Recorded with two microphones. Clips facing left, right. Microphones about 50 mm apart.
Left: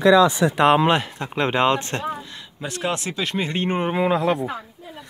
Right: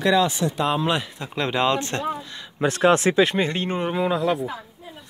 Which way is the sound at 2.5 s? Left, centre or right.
Right.